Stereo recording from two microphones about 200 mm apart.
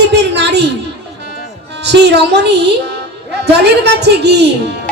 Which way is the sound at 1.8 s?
55° right (ahead or behind).